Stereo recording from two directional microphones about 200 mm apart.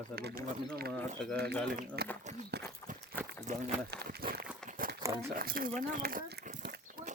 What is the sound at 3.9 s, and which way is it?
Speech, 50° right (ahead or behind).